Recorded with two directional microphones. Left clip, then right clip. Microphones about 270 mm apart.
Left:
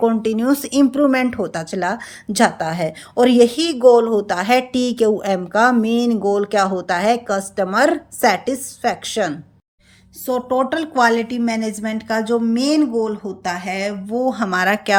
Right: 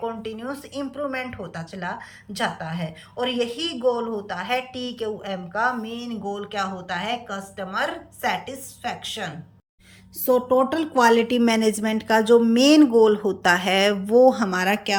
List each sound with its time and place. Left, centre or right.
0.1 s speech: left
10.2 s a woman's voice: centre